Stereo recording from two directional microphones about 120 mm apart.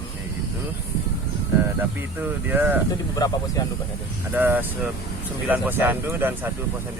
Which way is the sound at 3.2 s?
35° left (ahead or behind).